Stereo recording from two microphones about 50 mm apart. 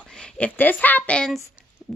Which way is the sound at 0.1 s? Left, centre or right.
Centre.